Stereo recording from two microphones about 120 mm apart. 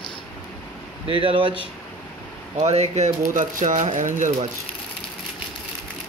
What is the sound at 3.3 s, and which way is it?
Speech, 90° right.